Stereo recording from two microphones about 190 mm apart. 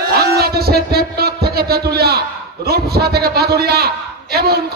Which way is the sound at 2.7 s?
55° right (ahead or behind).